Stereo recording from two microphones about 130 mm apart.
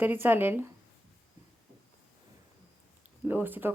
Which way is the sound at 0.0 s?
15° right (ahead or behind).